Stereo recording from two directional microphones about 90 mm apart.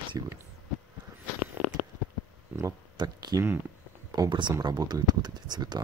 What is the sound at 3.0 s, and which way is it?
Speech, 50° right (ahead or behind).